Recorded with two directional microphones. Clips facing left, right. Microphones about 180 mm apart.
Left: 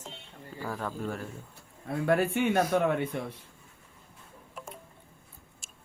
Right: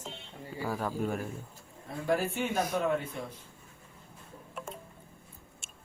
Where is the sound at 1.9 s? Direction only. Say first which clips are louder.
Left 4 dB; 65° left (ahead or behind).